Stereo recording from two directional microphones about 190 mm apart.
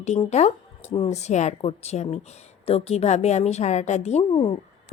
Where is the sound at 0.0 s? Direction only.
35° left (ahead or behind).